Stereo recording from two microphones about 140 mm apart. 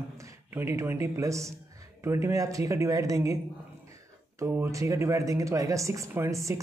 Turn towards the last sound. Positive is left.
turn(degrees=-20)  # may be behind; listen again after turning